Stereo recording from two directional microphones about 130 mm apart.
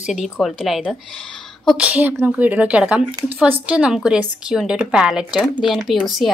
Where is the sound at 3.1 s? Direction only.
45° right (ahead or behind).